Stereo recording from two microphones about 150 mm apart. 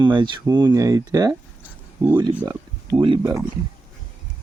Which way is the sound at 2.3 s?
10° right (ahead or behind).